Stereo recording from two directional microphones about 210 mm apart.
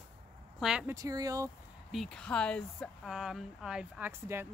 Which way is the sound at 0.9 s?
15° right (ahead or behind).